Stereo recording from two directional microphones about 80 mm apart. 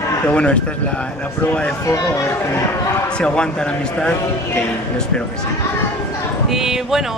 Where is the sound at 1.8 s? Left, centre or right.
Left.